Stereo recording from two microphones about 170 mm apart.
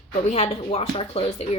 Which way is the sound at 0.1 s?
35° left (ahead or behind).